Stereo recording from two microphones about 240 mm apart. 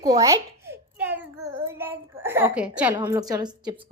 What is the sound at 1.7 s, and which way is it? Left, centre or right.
Child singing, centre.